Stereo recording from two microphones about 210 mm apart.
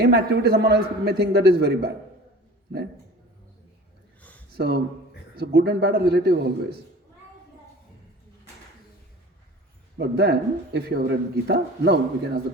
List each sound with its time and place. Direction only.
0.0 s speech: 50° right (ahead or behind)
4.2 s a sound: 5° left (ahead or behind)
4.5 s speech: 50° right (ahead or behind)
10.0 s speech: 50° right (ahead or behind)